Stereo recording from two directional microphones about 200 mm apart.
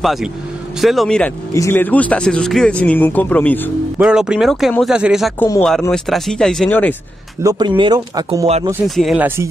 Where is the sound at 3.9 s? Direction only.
5° right (ahead or behind).